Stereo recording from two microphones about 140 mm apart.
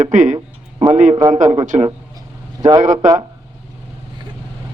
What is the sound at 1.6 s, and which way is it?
Speech, 60° right (ahead or behind).